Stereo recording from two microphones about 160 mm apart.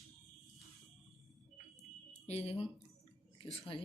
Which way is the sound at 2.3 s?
40° left (ahead or behind).